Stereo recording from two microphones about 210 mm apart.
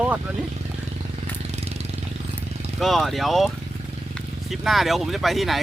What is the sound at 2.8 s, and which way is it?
Speech, centre (ahead or behind).